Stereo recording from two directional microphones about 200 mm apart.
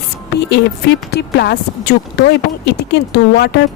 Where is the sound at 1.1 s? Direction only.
55° left (ahead or behind).